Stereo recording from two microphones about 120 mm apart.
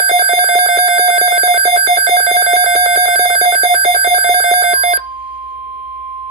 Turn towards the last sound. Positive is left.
turn(degrees=-60)  # may be behind; listen again after turning